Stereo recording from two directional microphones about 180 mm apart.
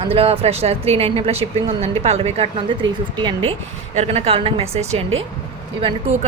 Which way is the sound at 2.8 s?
90° right.